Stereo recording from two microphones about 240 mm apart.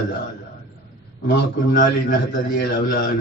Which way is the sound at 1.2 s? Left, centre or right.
Left.